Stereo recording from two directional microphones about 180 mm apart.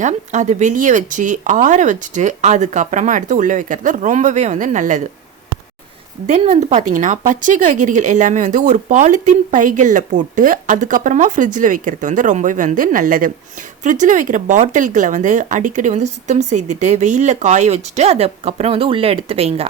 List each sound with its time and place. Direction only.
0.0 s a woman's voice: 40° right (ahead or behind)
6.2 s a woman's voice: 35° right (ahead or behind)